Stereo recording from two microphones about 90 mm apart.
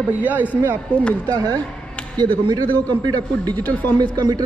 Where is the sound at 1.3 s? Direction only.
50° right (ahead or behind).